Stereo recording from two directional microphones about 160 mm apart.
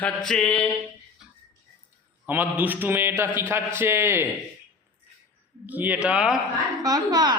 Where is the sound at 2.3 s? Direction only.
10° right (ahead or behind).